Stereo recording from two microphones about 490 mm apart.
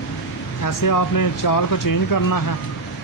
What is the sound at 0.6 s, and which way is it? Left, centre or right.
Speech, left.